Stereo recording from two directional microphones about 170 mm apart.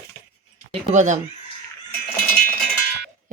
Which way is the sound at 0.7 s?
45° right (ahead or behind).